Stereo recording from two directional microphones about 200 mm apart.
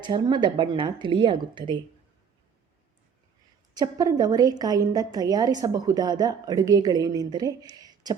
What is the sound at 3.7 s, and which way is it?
A woman's voice, 20° right (ahead or behind).